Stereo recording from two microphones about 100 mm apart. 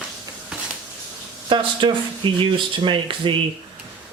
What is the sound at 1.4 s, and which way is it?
Speech, 55° right (ahead or behind).